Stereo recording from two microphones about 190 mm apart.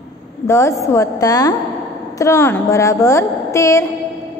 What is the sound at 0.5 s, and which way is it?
A woman's voice, 15° left (ahead or behind).